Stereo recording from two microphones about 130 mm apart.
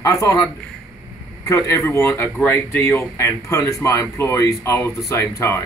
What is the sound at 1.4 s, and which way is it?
Speech, 25° left (ahead or behind).